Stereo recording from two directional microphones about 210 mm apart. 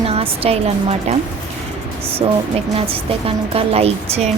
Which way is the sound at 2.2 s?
25° right (ahead or behind).